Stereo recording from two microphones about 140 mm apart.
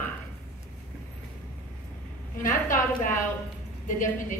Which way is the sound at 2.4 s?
70° left (ahead or behind).